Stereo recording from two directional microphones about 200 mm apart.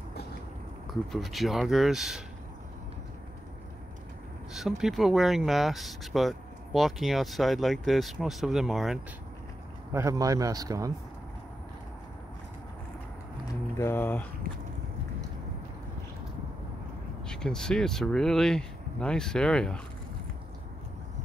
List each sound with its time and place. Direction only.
1.1 s speech: centre (ahead or behind)
4.6 s speech: centre (ahead or behind)
9.9 s a man's voice: 15° right (ahead or behind)
13.7 s a sound: 10° left (ahead or behind)
17.3 s speech: 5° left (ahead or behind)